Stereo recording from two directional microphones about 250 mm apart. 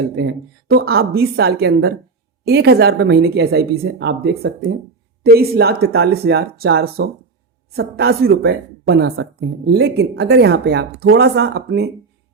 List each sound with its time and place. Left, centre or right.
0.2 s a woman's voice: right